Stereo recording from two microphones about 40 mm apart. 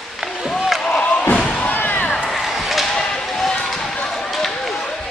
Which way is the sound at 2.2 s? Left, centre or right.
Centre.